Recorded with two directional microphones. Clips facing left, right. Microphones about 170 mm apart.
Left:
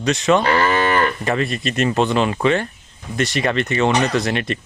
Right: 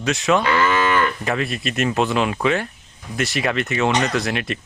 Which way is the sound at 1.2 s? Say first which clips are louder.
Left 2 dB; centre (ahead or behind).